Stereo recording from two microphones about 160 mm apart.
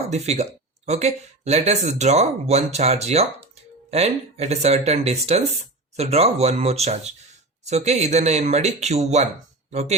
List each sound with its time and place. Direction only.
0.1 s speech: 45° right (ahead or behind)